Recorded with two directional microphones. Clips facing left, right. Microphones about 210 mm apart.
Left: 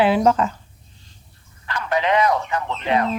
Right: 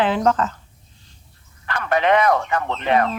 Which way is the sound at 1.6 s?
55° right (ahead or behind).